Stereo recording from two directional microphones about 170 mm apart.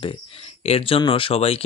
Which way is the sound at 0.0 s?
35° left (ahead or behind).